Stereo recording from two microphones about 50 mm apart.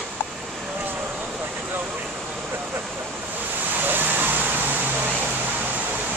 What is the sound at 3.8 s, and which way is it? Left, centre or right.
Vehicle, right.